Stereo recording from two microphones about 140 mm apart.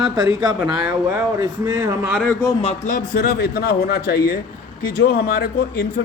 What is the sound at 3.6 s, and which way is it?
Speech, 90° left.